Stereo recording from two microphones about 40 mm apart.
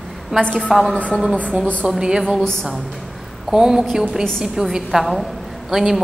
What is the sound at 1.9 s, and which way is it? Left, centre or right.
Speech, centre.